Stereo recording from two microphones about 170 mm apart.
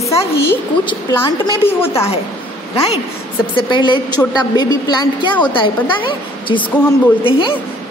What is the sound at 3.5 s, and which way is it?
A woman's voice, 30° left (ahead or behind).